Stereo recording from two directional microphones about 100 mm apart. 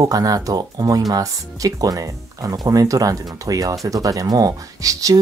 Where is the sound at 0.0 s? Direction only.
40° right (ahead or behind).